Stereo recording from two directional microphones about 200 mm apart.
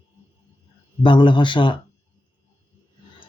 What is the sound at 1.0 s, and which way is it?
Speech, 25° left (ahead or behind).